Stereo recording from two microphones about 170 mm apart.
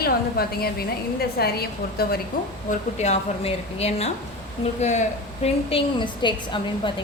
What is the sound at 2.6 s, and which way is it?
A woman's voice, 40° left (ahead or behind).